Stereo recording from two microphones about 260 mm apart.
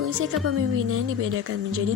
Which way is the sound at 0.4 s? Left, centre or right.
Right.